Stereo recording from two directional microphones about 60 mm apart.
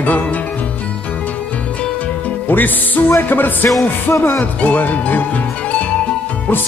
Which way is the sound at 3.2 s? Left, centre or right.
Left.